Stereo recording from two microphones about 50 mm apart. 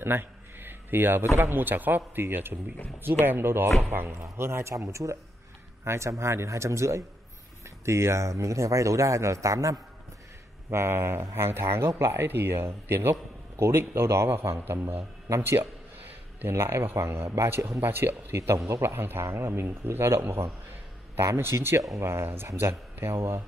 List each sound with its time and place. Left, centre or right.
0.0 s a sound: right
1.4 s speech: right
4.1 s a man's voice: right
5.9 s a man's voice: right
7.8 s speech: right
10.7 s a man's voice: right
16.4 s a man's voice: right
17.7 s speech: right
18.7 s a man's voice: right
18.9 s speech: right
19.2 s speech: right